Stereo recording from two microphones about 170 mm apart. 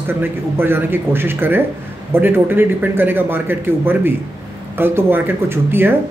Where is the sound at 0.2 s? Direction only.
10° right (ahead or behind).